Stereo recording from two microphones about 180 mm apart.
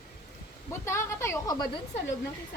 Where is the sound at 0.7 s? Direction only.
15° left (ahead or behind).